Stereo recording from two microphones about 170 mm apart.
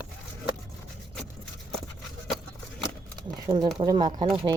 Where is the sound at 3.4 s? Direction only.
25° right (ahead or behind).